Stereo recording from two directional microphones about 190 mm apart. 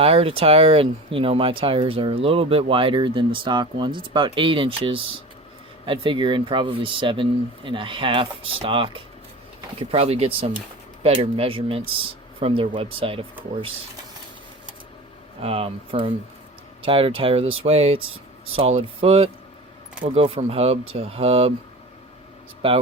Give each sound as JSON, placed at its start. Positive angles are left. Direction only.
{"t": 0.0, "sound": "speech", "side_deg": -30}
{"t": 15.4, "sound": "speech", "side_deg": -30}
{"t": 22.6, "sound": "speech", "side_deg": -30}